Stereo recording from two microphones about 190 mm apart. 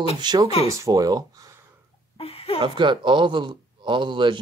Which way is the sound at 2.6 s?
25° right (ahead or behind).